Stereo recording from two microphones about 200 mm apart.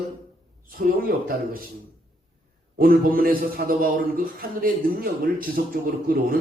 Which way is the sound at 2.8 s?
45° right (ahead or behind).